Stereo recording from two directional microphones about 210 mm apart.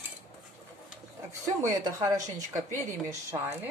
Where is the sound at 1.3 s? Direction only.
15° right (ahead or behind).